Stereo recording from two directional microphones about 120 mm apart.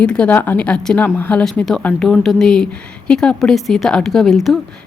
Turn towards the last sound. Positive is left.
turn(degrees=0)  # may be behind; listen again after turning